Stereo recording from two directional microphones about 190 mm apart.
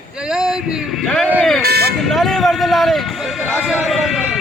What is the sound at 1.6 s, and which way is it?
Speech, 55° right (ahead or behind).